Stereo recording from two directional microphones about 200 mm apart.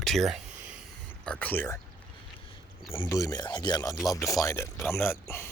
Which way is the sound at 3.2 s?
20° left (ahead or behind).